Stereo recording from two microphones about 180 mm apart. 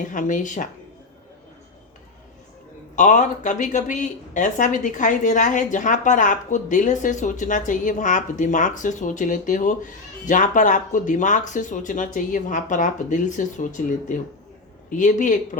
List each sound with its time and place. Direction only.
0.0 s speech: 45° left (ahead or behind)
2.9 s speech: 45° left (ahead or behind)